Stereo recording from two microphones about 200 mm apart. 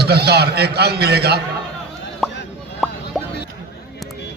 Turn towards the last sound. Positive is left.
turn(degrees=0)  # may be behind; listen again after turning